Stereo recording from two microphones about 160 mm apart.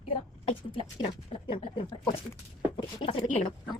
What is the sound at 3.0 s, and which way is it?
Speech, 40° left (ahead or behind).